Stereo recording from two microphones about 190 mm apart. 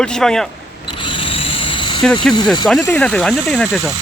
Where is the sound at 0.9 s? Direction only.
25° left (ahead or behind).